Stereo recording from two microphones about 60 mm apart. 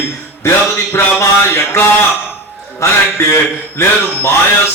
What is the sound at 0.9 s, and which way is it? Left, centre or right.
Speech, left.